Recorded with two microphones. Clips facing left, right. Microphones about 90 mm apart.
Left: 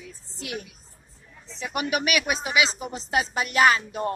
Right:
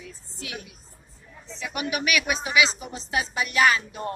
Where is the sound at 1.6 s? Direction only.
40° left (ahead or behind).